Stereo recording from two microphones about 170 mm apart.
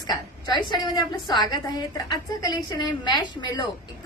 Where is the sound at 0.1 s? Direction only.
25° left (ahead or behind).